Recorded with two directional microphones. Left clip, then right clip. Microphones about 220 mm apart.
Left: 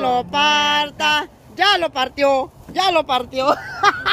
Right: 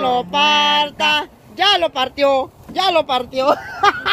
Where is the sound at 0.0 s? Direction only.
5° left (ahead or behind).